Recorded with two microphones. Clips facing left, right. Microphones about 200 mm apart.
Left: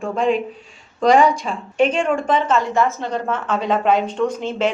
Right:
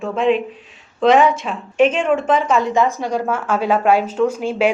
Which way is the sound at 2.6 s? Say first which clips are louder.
Right 2 dB; 20° right (ahead or behind).